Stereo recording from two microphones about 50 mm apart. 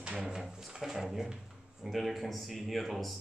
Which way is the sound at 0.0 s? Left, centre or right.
Right.